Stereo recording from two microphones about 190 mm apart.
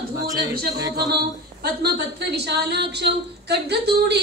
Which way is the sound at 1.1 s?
55° right (ahead or behind).